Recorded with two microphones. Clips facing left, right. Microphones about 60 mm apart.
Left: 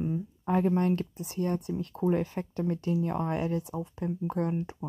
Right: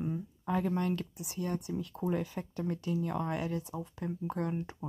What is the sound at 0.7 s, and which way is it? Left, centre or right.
Speech, left.